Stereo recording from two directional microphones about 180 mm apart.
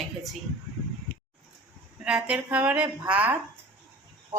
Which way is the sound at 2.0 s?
5° right (ahead or behind).